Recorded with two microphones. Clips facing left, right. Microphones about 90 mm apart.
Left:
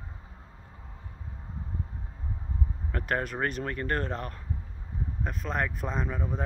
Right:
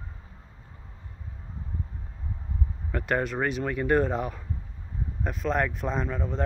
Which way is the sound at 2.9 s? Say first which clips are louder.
Right 4 dB; centre (ahead or behind).